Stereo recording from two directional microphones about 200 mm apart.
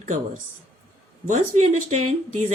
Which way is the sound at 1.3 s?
35° right (ahead or behind).